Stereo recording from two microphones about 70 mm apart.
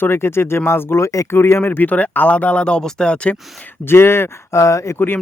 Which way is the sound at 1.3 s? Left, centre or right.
Left.